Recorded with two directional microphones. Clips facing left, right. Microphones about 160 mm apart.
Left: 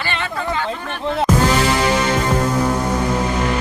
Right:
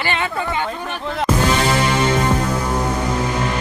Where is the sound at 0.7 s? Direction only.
10° right (ahead or behind).